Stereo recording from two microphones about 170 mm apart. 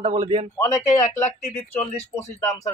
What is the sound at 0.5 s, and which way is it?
Speech, 15° left (ahead or behind).